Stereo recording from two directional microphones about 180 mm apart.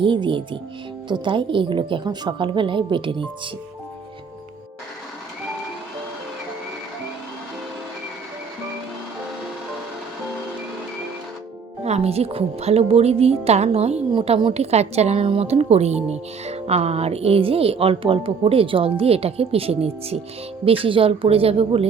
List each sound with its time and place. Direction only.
0.0 s a woman's voice: 25° right (ahead or behind)
11.8 s a woman's voice: 35° right (ahead or behind)